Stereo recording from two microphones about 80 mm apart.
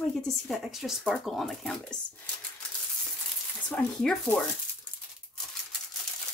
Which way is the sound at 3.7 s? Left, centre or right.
Centre.